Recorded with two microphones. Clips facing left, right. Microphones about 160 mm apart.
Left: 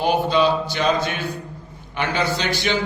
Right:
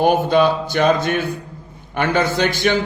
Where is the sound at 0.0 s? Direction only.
50° right (ahead or behind).